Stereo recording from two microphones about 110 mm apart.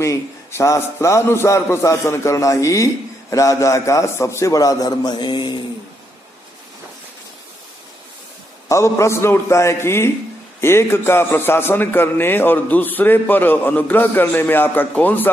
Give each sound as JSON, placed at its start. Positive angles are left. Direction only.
{"t": 0.0, "sound": "a man's voice", "side_deg": 25}
{"t": 8.6, "sound": "a man's voice", "side_deg": 25}